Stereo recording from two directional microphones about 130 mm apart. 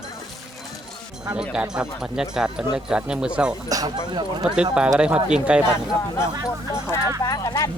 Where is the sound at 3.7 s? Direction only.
30° right (ahead or behind).